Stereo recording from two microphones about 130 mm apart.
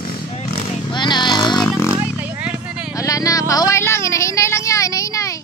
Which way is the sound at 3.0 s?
25° left (ahead or behind).